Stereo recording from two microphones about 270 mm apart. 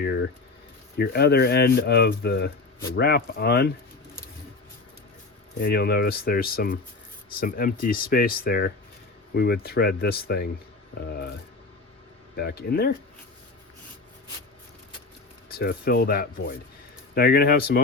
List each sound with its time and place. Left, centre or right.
0.0 s boiling: left
0.9 s speech: left
5.5 s speech: left
12.4 s speech: left
15.4 s speech: left